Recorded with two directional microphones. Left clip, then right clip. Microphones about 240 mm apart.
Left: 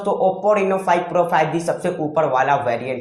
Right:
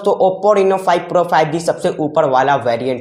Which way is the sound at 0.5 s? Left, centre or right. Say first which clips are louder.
Right 4 dB; right.